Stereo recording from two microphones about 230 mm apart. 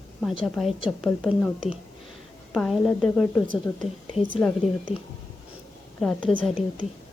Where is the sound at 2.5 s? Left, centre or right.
Centre.